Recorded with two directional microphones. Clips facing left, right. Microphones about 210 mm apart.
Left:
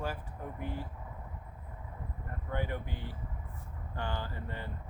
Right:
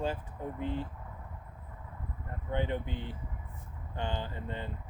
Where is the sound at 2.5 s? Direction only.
20° right (ahead or behind).